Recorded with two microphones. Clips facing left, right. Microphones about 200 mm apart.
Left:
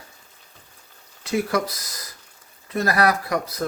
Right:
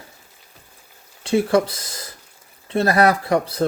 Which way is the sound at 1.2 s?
30° right (ahead or behind).